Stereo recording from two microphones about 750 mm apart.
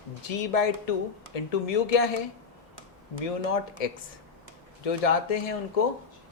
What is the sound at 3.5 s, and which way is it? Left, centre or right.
Speech, left.